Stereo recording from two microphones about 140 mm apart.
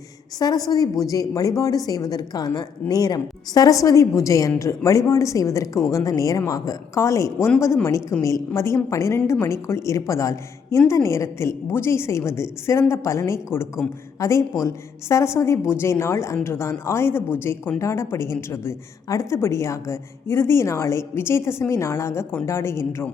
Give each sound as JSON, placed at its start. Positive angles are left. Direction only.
{"t": 0.3, "sound": "a woman's voice", "side_deg": 25}